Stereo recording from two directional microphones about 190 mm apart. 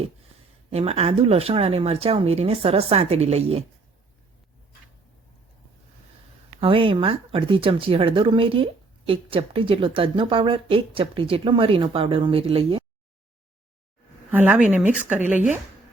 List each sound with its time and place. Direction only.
0.7 s speech: 35° right (ahead or behind)
6.6 s speech: 30° right (ahead or behind)
14.3 s speech: 10° right (ahead or behind)